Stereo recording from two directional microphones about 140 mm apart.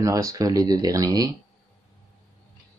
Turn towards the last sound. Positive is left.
turn(degrees=-25)  # may be behind; listen again after turning